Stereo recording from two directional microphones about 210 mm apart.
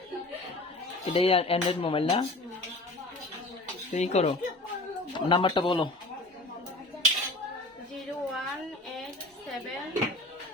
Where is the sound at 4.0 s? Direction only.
30° left (ahead or behind).